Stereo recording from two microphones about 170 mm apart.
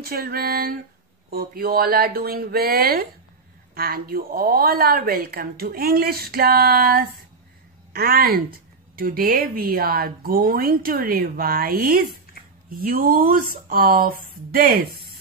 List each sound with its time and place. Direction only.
0.0 s a woman's voice: 60° right (ahead or behind)